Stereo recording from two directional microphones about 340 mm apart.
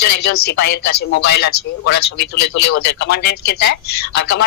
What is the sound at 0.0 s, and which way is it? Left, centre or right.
A man's voice, left.